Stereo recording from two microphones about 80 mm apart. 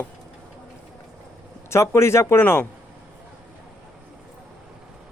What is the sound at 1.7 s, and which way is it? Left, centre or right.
Speech, left.